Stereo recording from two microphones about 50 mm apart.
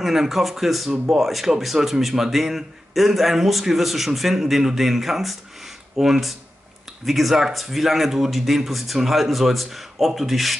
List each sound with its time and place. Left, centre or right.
0.0 s a man's voice: centre